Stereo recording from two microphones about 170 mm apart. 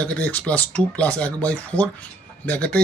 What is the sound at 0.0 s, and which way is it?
Speech, 10° left (ahead or behind).